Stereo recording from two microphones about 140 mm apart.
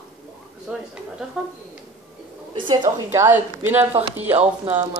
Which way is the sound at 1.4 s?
5° right (ahead or behind).